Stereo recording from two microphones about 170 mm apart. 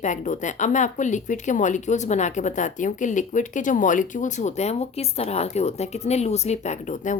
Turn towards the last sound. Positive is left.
turn(degrees=45)  # may be behind; listen again after turning